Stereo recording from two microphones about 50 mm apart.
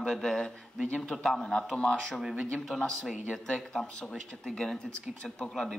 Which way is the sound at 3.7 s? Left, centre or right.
Centre.